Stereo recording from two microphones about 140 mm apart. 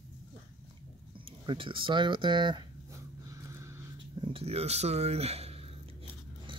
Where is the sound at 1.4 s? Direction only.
35° right (ahead or behind).